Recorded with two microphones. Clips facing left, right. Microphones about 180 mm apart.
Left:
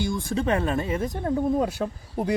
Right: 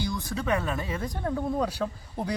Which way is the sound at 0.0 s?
50° left (ahead or behind).